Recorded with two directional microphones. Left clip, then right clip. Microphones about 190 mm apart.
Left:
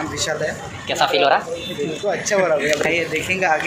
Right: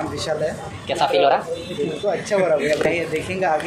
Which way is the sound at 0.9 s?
5° left (ahead or behind).